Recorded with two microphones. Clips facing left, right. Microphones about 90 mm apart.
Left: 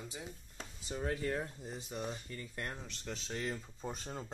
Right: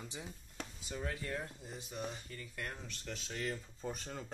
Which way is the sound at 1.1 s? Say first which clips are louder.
Left 5 dB; 40° left (ahead or behind).